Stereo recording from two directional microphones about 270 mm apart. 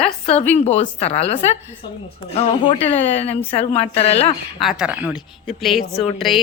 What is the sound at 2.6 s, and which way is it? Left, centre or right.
A woman's voice, left.